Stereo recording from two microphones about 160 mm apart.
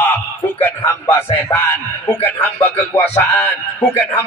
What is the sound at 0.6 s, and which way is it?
Speech, 15° left (ahead or behind).